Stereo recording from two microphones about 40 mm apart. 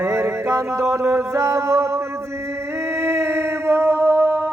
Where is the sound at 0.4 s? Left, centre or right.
Right.